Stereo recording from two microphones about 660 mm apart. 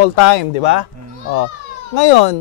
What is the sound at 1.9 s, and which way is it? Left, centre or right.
Speech, left.